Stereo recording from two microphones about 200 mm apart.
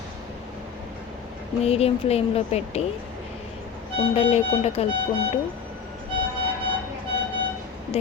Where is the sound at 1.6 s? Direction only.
30° left (ahead or behind).